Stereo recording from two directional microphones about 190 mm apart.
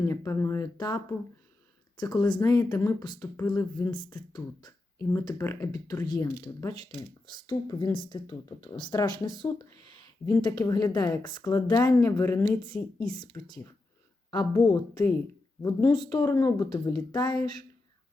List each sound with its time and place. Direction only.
0.0 s speech: 15° left (ahead or behind)